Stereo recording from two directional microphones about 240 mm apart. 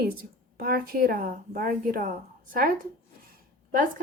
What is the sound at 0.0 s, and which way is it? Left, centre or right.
A woman's voice, right.